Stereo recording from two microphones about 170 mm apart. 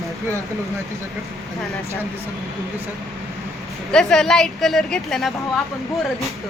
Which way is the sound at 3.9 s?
5° left (ahead or behind).